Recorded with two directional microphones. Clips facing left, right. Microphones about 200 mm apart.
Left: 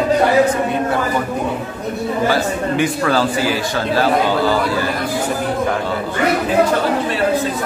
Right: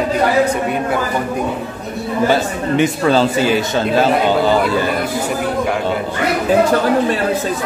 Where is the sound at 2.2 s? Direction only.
20° right (ahead or behind).